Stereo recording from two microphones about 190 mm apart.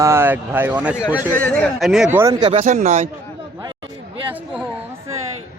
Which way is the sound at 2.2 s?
20° right (ahead or behind).